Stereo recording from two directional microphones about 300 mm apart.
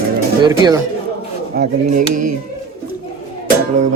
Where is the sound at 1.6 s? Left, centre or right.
Right.